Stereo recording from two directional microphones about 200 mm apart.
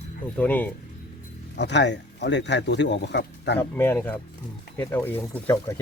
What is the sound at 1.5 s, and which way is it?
Speech, 60° left (ahead or behind).